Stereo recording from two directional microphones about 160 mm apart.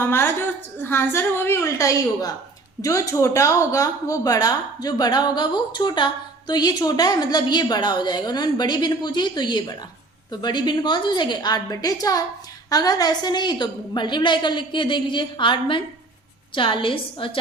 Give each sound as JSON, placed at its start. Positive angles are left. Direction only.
{"t": 0.0, "sound": "a woman's voice", "side_deg": 15}